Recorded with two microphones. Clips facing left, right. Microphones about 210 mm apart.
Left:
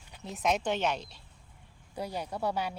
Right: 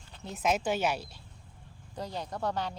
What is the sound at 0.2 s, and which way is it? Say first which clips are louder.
Speech: even; centre (ahead or behind).